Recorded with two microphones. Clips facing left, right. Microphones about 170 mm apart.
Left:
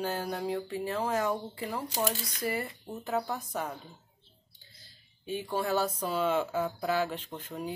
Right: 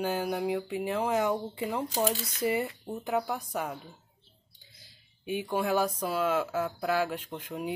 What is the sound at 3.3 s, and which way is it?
Speech, 10° right (ahead or behind).